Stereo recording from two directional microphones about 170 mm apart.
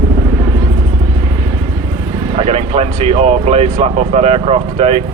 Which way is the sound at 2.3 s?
40° right (ahead or behind).